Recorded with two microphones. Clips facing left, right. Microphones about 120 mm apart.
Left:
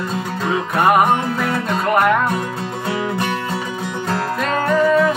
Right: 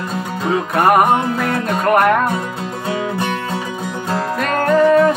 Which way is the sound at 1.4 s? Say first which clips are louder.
Right 2 dB; 50° right (ahead or behind).